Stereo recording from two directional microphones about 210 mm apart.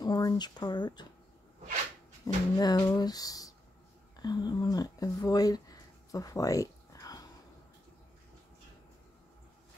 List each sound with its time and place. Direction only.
0.0 s speech: 20° left (ahead or behind)
2.2 s speech: 20° left (ahead or behind)